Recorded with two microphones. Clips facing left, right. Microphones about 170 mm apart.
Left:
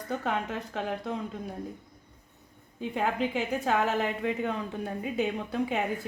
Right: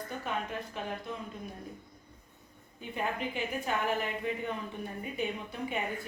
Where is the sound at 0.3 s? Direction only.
90° left.